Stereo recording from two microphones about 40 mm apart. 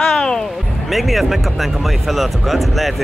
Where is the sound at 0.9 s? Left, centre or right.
Centre.